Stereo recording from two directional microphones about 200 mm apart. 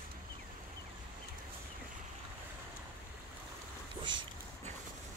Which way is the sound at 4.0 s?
25° right (ahead or behind).